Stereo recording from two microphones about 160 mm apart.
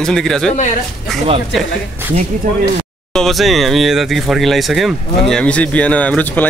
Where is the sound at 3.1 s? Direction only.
Centre (ahead or behind).